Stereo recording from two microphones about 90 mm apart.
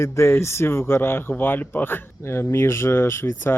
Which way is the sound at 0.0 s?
30° left (ahead or behind).